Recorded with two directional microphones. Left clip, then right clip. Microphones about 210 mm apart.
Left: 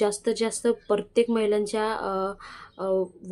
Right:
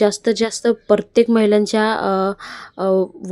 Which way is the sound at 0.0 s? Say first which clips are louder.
Right 8 dB; 30° right (ahead or behind).